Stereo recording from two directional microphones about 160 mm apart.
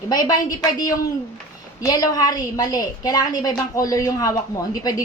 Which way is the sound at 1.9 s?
25° left (ahead or behind).